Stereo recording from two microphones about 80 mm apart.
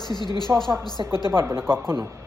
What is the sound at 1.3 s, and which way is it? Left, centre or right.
Speech, right.